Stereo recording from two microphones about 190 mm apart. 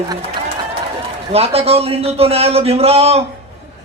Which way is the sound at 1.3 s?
30° right (ahead or behind).